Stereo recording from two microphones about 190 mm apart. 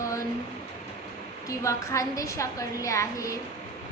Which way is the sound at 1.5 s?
15° left (ahead or behind).